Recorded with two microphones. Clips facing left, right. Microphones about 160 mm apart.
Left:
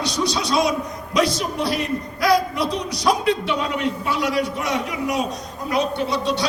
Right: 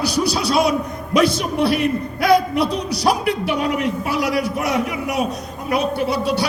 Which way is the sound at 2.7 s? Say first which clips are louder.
Right 3 dB; 30° right (ahead or behind).